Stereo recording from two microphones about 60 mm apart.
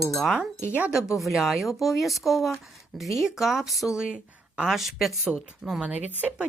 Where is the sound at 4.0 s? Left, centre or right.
Centre.